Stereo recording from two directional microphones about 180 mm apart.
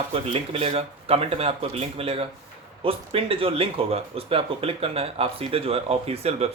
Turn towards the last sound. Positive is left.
turn(degrees=-35)  # may be behind; listen again after turning